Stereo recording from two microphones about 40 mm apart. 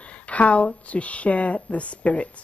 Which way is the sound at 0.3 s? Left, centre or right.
Left.